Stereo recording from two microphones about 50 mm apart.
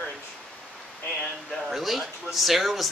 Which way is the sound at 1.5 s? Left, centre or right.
Centre.